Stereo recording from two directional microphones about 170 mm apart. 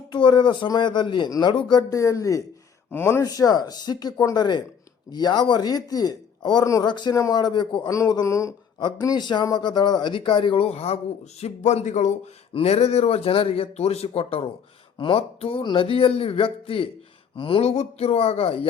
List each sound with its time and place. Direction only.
0.1 s speech: 25° left (ahead or behind)